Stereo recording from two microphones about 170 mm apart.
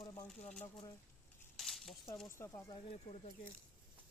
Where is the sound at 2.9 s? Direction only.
40° left (ahead or behind).